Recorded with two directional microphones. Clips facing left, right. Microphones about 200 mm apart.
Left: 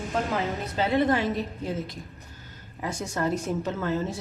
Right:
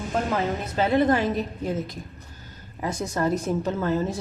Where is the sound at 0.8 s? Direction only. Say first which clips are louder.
Right 3 dB; 45° right (ahead or behind).